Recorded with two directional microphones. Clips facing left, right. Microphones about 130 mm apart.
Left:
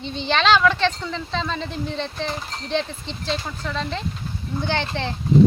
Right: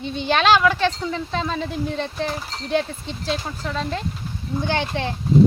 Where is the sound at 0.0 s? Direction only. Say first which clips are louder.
Right 2 dB; 10° right (ahead or behind).